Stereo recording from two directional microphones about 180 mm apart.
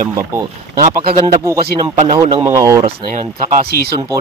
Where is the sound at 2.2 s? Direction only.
15° right (ahead or behind).